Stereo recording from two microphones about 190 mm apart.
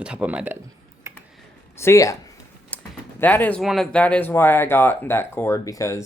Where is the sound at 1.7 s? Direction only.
15° left (ahead or behind).